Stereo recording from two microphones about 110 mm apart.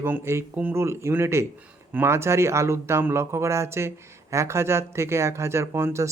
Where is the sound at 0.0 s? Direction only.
20° right (ahead or behind).